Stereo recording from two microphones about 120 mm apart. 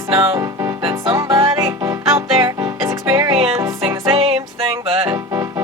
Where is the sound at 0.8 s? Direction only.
40° right (ahead or behind).